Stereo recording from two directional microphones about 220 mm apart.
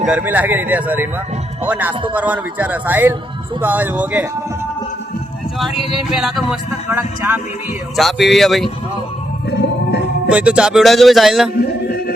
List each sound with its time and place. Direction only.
0.0 s speech: 5° right (ahead or behind)
6.1 s speech: centre (ahead or behind)
9.5 s music: 50° left (ahead or behind)
10.2 s speech: 5° right (ahead or behind)
11.5 s a sound: 45° left (ahead or behind)